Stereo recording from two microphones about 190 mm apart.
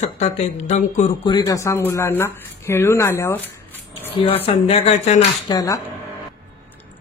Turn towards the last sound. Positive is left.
turn(degrees=20)  # may be behind; listen again after turning